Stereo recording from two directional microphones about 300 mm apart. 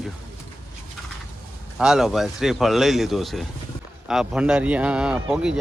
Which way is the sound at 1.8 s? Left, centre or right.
Centre.